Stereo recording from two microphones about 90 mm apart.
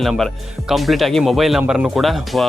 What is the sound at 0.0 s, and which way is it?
Speech, centre (ahead or behind).